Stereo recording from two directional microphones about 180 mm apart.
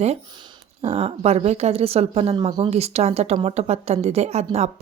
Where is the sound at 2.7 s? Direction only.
35° right (ahead or behind).